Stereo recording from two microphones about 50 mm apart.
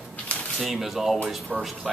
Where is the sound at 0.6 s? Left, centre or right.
Centre.